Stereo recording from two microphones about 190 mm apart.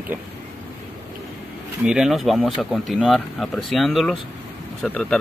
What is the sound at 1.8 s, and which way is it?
Speech, centre (ahead or behind).